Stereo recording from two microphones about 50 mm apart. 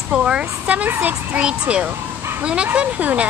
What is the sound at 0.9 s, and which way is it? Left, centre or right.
Speech, right.